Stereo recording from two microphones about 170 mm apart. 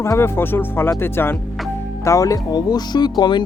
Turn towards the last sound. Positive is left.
turn(degrees=25)  # may be behind; listen again after turning